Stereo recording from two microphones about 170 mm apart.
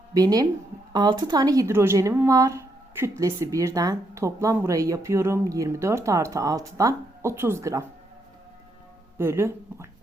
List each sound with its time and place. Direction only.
0.1 s speech: 20° right (ahead or behind)
9.1 s speech: 15° right (ahead or behind)